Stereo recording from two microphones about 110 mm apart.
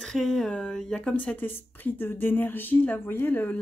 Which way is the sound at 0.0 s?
Centre (ahead or behind).